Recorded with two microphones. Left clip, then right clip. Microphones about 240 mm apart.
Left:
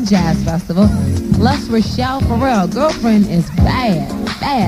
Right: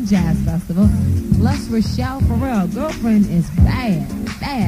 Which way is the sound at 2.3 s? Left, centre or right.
Right.